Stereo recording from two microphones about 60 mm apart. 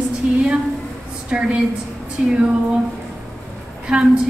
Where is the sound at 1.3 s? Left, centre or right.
Centre.